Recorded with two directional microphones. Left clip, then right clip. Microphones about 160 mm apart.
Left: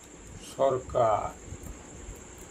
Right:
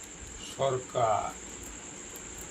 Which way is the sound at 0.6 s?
60° left (ahead or behind).